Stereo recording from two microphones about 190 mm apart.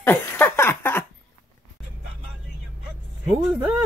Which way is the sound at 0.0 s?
10° left (ahead or behind).